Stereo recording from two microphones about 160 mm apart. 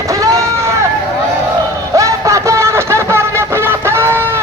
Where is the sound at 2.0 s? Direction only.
20° right (ahead or behind).